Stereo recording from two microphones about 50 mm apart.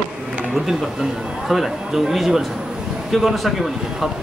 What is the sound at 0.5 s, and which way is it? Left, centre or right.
A man's voice, centre.